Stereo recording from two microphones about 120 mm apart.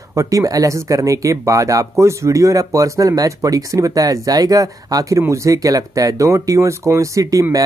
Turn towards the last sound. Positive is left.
turn(degrees=-25)  # may be behind; listen again after turning